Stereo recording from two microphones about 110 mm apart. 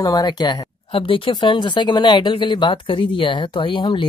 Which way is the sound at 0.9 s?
55° left (ahead or behind).